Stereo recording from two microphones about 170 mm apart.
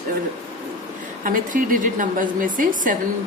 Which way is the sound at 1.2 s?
55° right (ahead or behind).